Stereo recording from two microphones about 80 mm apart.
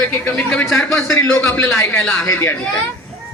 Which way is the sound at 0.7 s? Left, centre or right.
Centre.